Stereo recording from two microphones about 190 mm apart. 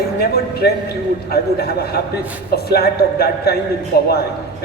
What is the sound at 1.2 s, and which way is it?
Speech, 55° left (ahead or behind).